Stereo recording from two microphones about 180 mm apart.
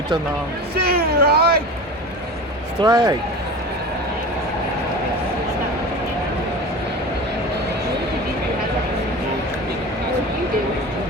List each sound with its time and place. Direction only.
0.8 s speech: 60° right (ahead or behind)
2.8 s a man's voice: 20° right (ahead or behind)